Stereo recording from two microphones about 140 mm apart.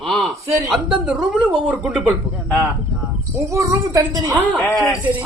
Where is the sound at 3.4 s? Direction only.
20° right (ahead or behind).